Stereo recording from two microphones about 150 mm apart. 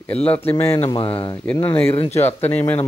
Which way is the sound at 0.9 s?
35° left (ahead or behind).